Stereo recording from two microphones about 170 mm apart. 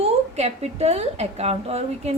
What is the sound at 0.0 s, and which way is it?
A woman's voice, 40° right (ahead or behind).